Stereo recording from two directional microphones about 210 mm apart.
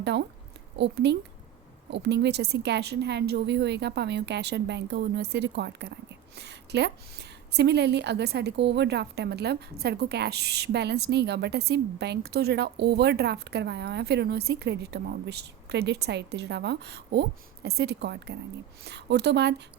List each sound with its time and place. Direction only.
0.0 s a woman's voice: 55° right (ahead or behind)